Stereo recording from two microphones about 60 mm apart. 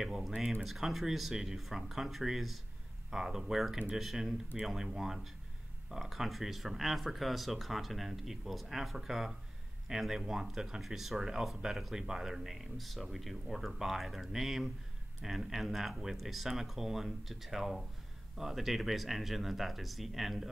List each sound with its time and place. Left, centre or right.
0.0 s speech: centre